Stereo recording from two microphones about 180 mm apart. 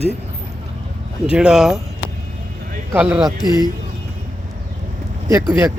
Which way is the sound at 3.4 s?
20° left (ahead or behind).